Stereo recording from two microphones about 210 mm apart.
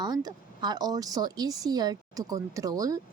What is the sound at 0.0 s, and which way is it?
Speech, 20° right (ahead or behind).